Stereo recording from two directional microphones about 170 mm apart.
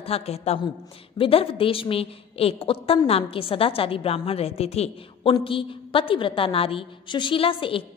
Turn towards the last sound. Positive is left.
turn(degrees=30)  # may be behind; listen again after turning